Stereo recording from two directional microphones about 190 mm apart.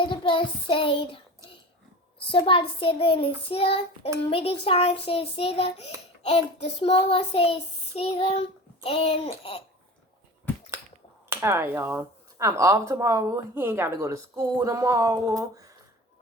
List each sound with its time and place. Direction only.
0.0 s child singing: 25° left (ahead or behind)
2.1 s a child's voice: 30° left (ahead or behind)
4.3 s child singing: 30° left (ahead or behind)
11.3 s speech: 15° right (ahead or behind)